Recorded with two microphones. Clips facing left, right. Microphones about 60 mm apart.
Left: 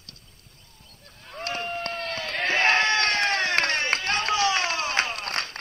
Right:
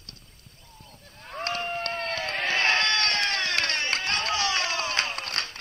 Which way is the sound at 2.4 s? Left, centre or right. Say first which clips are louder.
Left 3 dB; left.